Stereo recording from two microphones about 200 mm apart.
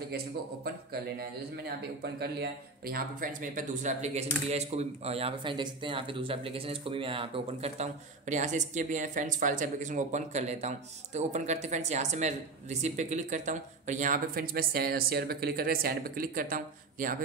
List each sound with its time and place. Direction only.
2.8 s speech: 45° right (ahead or behind)